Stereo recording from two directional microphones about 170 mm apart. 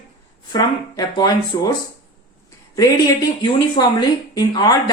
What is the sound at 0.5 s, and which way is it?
Speech, 25° left (ahead or behind).